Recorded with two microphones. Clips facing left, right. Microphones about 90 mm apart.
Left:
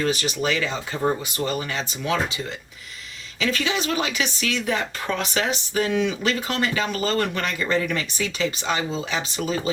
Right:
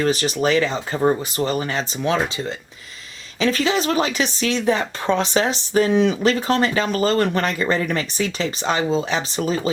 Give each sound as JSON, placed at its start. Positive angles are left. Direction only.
{"t": 0.0, "sound": "speech", "side_deg": -35}
{"t": 3.4, "sound": "speech", "side_deg": -35}